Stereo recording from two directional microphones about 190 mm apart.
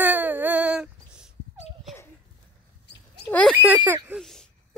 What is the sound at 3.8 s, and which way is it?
Speech, 10° right (ahead or behind).